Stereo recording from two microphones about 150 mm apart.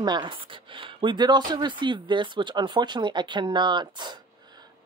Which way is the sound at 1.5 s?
30° right (ahead or behind).